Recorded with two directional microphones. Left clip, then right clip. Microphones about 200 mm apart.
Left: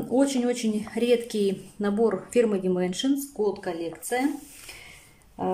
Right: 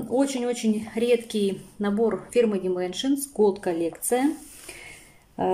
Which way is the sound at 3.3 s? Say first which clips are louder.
Right 5 dB; 15° right (ahead or behind).